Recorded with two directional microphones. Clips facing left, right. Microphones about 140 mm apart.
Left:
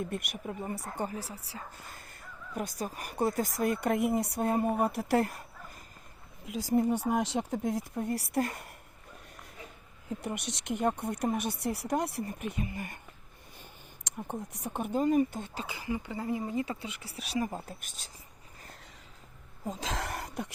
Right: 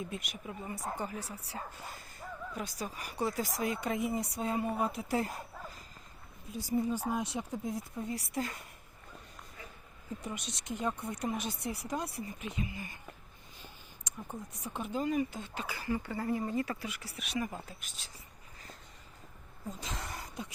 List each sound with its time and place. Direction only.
0.0 s speech: 60° left (ahead or behind)
0.6 s speech: 45° left (ahead or behind)
1.1 s speech: 30° left (ahead or behind)
1.9 s a sound: 55° left (ahead or behind)
2.6 s speech: 50° left (ahead or behind); by 5.3 s 65° left (ahead or behind)
6.4 s speech: 90° left; by 8.7 s 60° left (ahead or behind)
10.2 s speech: 70° left (ahead or behind)
14.1 s a sound: 80° left
14.5 s speech: 60° left (ahead or behind)
15.5 s speech: 20° left (ahead or behind)
17.7 s speech: 45° left (ahead or behind)
19.6 s speech: 85° left; by 20.5 s 65° left (ahead or behind)